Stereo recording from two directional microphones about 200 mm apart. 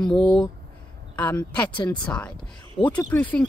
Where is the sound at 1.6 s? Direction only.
25° left (ahead or behind).